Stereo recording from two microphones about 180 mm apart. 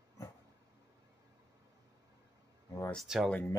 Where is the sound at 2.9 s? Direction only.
Centre (ahead or behind).